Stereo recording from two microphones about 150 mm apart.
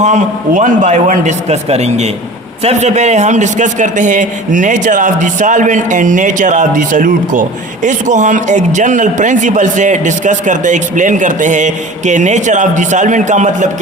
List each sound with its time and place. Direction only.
0.0 s a man's voice: 55° right (ahead or behind)